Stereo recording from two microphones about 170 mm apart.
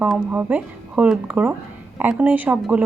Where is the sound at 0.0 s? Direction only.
10° right (ahead or behind).